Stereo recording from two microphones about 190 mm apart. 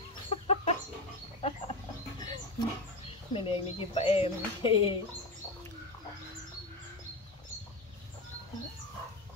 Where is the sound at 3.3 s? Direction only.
30° left (ahead or behind).